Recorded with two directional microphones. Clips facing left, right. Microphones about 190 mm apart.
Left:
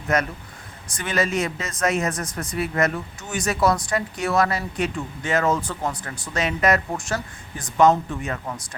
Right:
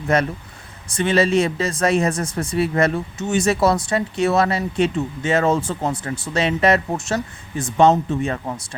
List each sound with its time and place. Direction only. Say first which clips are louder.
0.1 s speech: right 3 dB; 30° right (ahead or behind)